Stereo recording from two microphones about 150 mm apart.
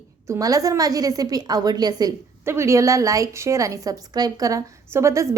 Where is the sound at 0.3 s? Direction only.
25° right (ahead or behind).